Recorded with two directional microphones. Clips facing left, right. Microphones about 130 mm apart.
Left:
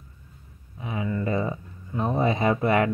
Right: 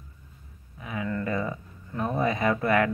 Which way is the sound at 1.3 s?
20° left (ahead or behind).